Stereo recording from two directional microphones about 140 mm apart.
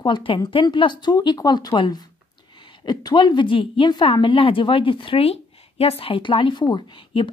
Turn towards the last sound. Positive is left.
turn(degrees=35)  # may be behind; listen again after turning